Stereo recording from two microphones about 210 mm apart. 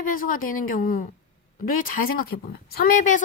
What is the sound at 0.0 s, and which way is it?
A woman's voice, 40° left (ahead or behind).